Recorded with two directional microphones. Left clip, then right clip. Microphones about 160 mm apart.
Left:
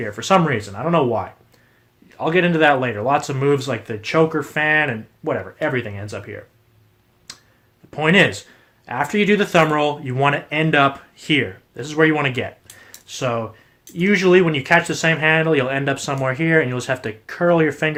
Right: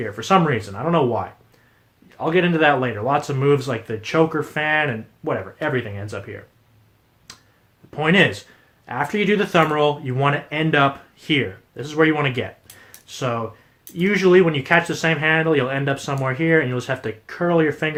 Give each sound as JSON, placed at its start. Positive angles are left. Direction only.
{"t": 0.0, "sound": "speech", "side_deg": 30}
{"t": 7.3, "sound": "a sound", "side_deg": 25}
{"t": 7.9, "sound": "speech", "side_deg": 30}
{"t": 12.8, "sound": "typing", "side_deg": 25}
{"t": 14.0, "sound": "speech", "side_deg": 25}